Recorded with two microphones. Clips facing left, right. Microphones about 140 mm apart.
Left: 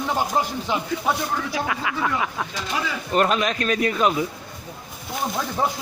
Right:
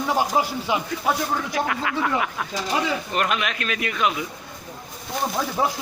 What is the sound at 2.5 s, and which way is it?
Speech, 35° right (ahead or behind).